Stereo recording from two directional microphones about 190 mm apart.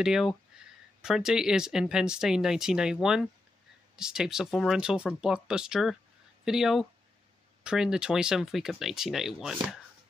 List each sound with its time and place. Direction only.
0.0 s speech: centre (ahead or behind)